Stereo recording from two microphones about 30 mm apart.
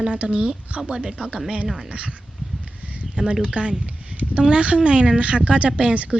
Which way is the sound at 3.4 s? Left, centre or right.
Right.